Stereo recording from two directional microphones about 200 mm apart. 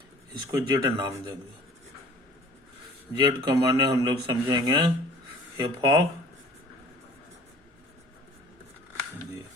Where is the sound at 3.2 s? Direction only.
20° right (ahead or behind).